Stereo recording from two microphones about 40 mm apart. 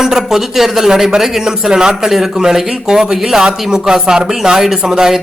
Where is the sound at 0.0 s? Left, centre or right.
Centre.